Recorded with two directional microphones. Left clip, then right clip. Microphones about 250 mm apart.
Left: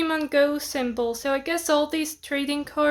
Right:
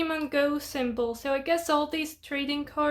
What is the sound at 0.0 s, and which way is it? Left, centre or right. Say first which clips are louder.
Speech: left 5 dB; centre.